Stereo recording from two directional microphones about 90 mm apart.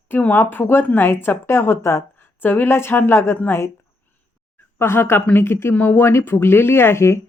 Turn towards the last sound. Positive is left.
turn(degrees=30)  # may be behind; listen again after turning